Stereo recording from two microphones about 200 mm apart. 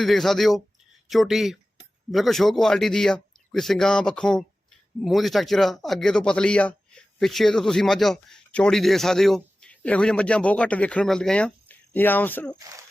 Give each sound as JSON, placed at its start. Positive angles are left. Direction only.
{"t": 0.0, "sound": "speech", "side_deg": 0}